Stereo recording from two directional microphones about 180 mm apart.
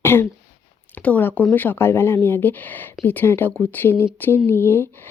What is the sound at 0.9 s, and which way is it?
Speech, 10° left (ahead or behind).